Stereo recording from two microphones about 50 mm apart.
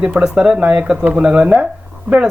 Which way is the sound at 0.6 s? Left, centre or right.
Right.